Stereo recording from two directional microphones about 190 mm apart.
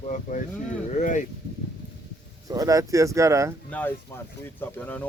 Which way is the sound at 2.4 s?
20° right (ahead or behind).